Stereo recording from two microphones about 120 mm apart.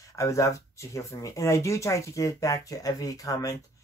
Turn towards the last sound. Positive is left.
turn(degrees=30)  # may be behind; listen again after turning